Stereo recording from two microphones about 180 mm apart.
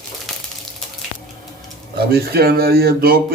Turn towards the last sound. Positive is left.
turn(degrees=-55)  # may be behind; listen again after turning